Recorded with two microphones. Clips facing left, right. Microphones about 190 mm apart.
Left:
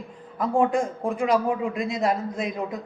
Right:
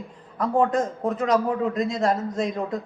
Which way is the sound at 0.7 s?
10° left (ahead or behind).